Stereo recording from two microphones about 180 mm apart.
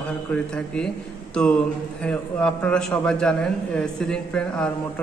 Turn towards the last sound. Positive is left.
turn(degrees=5)  # may be behind; listen again after turning